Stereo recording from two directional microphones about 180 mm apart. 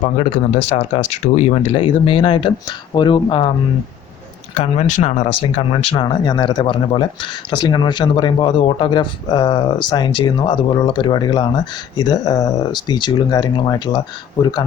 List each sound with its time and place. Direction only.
0.2 s speech: 35° left (ahead or behind)
4.5 s speech: 40° left (ahead or behind); by 14.0 s 20° left (ahead or behind)